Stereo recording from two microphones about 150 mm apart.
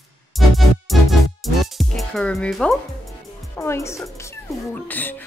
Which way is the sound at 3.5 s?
20° left (ahead or behind).